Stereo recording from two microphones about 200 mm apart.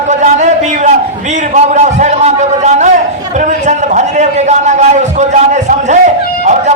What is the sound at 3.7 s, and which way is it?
A man's voice, 35° right (ahead or behind).